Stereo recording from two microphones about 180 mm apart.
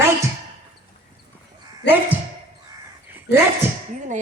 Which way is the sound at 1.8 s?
70° left (ahead or behind).